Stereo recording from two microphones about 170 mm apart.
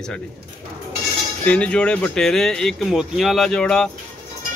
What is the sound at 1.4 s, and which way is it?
Speech, 5° left (ahead or behind).